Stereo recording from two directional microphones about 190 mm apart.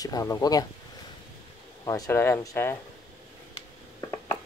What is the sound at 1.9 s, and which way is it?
Speech, 15° left (ahead or behind).